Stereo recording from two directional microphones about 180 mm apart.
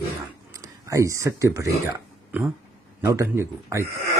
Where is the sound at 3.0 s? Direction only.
15° right (ahead or behind).